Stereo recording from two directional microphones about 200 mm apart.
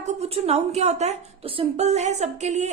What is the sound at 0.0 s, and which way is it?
A woman's voice, 30° right (ahead or behind).